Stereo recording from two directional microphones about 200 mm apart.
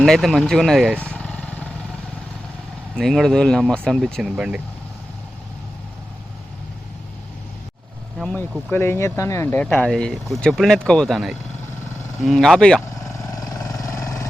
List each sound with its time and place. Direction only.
0.0 s speech: centre (ahead or behind)
1.1 s vehicle: 5° left (ahead or behind)
2.9 s speech: centre (ahead or behind)
8.2 s speech: 5° left (ahead or behind)
13.4 s vehicle: 20° left (ahead or behind)